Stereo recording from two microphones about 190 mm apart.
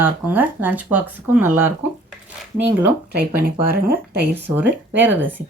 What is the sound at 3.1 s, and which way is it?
Speech, 50° right (ahead or behind).